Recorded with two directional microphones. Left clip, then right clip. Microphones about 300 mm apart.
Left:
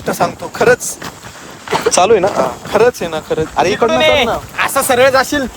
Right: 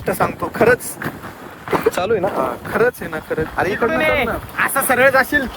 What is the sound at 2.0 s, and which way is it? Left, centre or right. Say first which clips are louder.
Speech: left 8 dB; centre.